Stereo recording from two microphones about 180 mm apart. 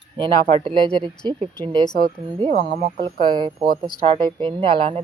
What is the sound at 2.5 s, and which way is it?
Speech, 35° right (ahead or behind).